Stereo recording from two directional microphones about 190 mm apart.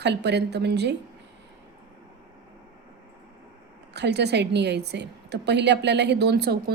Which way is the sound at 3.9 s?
60° right (ahead or behind).